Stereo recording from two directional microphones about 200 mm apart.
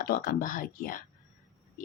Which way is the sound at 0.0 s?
45° left (ahead or behind).